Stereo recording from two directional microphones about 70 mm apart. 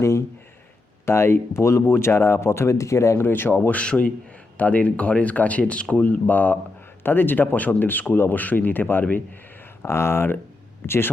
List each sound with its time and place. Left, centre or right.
1.0 s speech: left
3.2 s speech: left
3.7 s speech: centre
9.8 s speech: left